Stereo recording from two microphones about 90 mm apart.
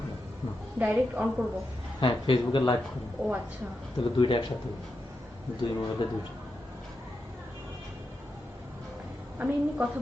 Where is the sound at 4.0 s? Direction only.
70° left (ahead or behind).